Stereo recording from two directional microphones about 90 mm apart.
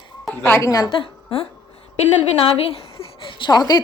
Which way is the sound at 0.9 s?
85° left.